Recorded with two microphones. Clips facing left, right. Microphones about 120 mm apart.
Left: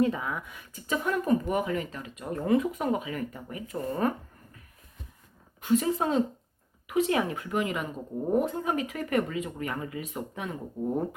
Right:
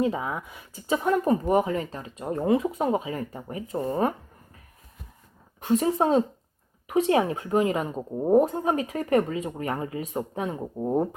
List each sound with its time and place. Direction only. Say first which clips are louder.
0.0 s speech: right 1 dB; 25° right (ahead or behind)
5.5 s speech: right 3 dB; 35° right (ahead or behind)